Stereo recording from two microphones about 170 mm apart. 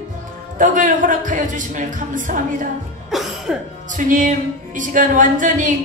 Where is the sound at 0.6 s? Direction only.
50° right (ahead or behind).